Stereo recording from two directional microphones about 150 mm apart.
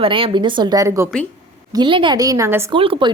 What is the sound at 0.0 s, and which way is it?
Speech, 35° right (ahead or behind).